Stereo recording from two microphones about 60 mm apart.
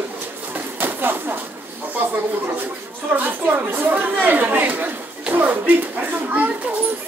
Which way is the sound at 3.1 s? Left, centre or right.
Right.